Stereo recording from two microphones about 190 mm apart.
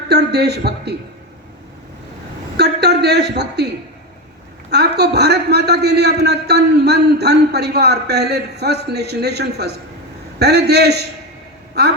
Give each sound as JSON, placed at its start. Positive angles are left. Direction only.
{"t": 0.1, "sound": "a woman's voice", "side_deg": -60}
{"t": 2.6, "sound": "a man's voice", "side_deg": -60}
{"t": 4.7, "sound": "a man's voice", "side_deg": -60}